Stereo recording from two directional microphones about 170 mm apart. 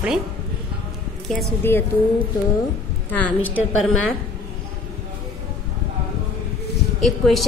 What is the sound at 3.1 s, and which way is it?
Speech, 10° left (ahead or behind).